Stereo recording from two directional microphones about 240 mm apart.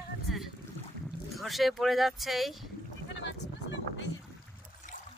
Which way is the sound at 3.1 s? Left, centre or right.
Left.